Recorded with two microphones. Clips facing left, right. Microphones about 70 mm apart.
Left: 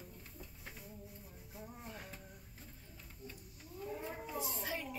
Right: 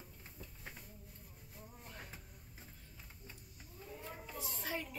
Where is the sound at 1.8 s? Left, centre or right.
Centre.